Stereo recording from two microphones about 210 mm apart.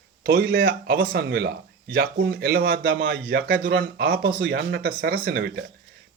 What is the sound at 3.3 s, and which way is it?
Speech, 45° right (ahead or behind).